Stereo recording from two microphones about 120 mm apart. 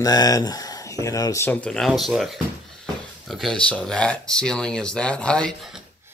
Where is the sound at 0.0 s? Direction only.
30° left (ahead or behind).